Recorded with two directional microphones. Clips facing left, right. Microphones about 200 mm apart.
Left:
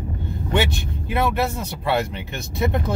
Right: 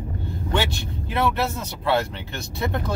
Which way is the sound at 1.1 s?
15° left (ahead or behind).